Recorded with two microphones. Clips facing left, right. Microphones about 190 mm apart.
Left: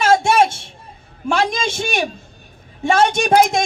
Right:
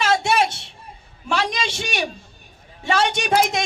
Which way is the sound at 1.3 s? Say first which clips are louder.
Left 4 dB; 45° left (ahead or behind).